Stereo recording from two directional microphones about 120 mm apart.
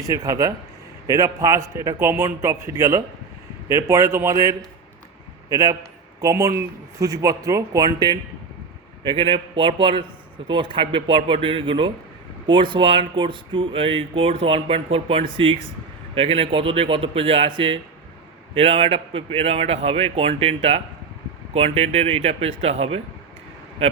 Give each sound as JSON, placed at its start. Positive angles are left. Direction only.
{"t": 0.1, "sound": "a man's voice", "side_deg": -30}